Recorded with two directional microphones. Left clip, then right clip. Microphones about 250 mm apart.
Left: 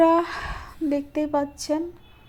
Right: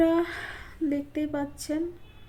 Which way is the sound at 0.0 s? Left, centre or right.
Centre.